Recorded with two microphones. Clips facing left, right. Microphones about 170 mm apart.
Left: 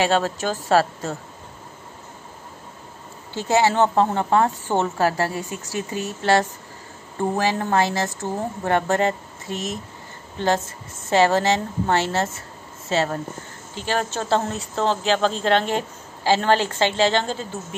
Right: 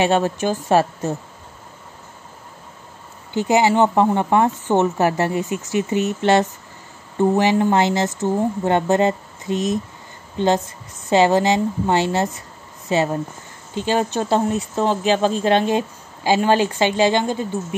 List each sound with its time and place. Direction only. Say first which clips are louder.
0.0 s a woman's voice: right 3 dB; 20° right (ahead or behind)
3.3 s a woman's voice: right 3 dB; 15° right (ahead or behind)